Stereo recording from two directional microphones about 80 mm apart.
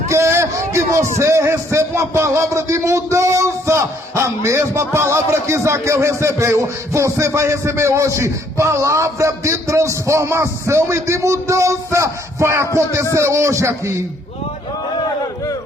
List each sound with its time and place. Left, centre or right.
0.1 s a man's voice: right